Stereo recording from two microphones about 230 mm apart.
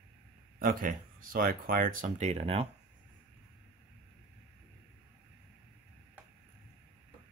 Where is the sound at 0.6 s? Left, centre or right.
Right.